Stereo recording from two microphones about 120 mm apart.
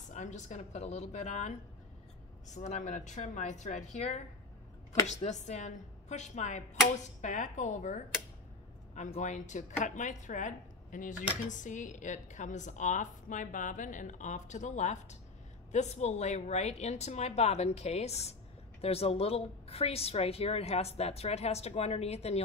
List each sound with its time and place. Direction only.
0.1 s a woman's voice: 85° left
2.5 s speech: 80° left
9.2 s a woman's voice: 90° left
15.7 s a woman's voice: 70° left (ahead or behind)